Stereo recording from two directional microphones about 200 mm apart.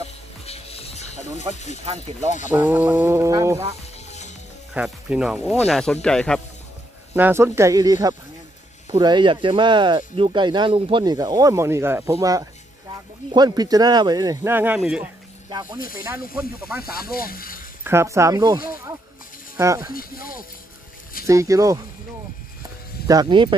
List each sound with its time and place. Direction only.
0.5 s music: 30° left (ahead or behind)
2.5 s speech: 10° right (ahead or behind)
4.7 s speech: 5° right (ahead or behind)
7.2 s speech: 10° right (ahead or behind)
16.3 s speech: 5° right (ahead or behind)
16.9 s speech: 50° left (ahead or behind)
17.8 s speech: 15° right (ahead or behind)
19.9 s speech: 45° left (ahead or behind)
21.3 s speech: 15° right (ahead or behind)
23.0 s speech: 20° right (ahead or behind)